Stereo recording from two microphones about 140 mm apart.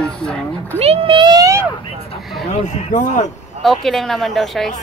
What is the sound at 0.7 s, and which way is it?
Speech, 40° right (ahead or behind).